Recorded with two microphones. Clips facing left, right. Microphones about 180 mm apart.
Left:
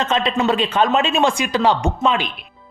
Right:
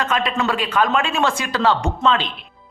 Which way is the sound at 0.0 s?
25° left (ahead or behind).